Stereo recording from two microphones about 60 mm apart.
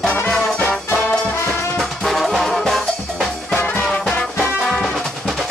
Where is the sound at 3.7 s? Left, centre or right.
Centre.